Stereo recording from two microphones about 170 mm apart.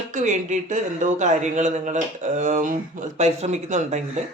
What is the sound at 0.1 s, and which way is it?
Speech, 45° right (ahead or behind).